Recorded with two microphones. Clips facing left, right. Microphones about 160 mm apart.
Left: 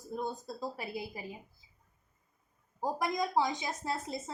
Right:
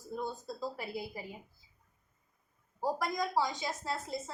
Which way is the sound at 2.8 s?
20° left (ahead or behind).